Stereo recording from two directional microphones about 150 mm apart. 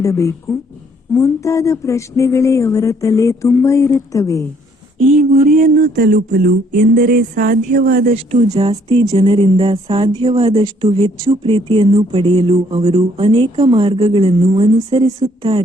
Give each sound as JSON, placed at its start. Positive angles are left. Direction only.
{"t": 0.0, "sound": "speech", "side_deg": 20}
{"t": 5.1, "sound": "a sound", "side_deg": -75}
{"t": 8.1, "sound": "speech", "side_deg": -45}
{"t": 14.8, "sound": "a woman's voice", "side_deg": -25}